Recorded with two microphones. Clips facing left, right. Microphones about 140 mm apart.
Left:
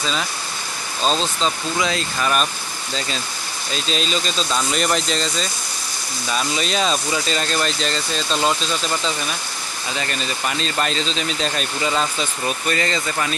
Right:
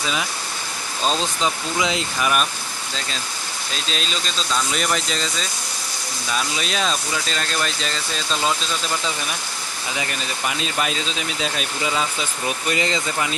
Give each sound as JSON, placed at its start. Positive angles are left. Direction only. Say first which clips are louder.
{"t": 0.0, "sound": "speech", "louder": "left 1 dB", "side_deg": -10}
{"t": 1.0, "sound": "speech", "louder": "left 2 dB", "side_deg": 20}
{"t": 1.4, "sound": "speech", "louder": "left 1 dB", "side_deg": -15}
{"t": 3.8, "sound": "speech", "louder": "left 5 dB", "side_deg": 0}
{"t": 9.9, "sound": "speech", "louder": "left 2 dB", "side_deg": -10}
{"t": 12.6, "sound": "speech", "louder": "right 1 dB", "side_deg": -15}